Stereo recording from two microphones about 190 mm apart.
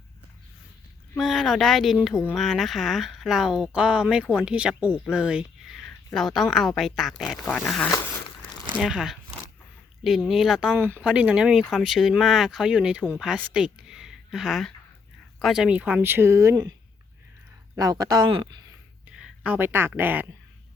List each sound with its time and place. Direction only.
1.1 s speech: centre (ahead or behind)
7.9 s a sound: 20° left (ahead or behind)
8.7 s speech: centre (ahead or behind); by 16.7 s 20° right (ahead or behind)
17.7 s speech: 20° right (ahead or behind)
19.0 s speech: 5° right (ahead or behind)